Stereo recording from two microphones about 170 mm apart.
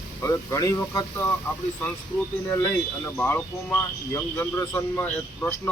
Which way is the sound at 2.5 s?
10° left (ahead or behind).